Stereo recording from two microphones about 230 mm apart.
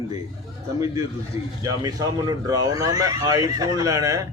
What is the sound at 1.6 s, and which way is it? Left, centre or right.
A man's voice, centre.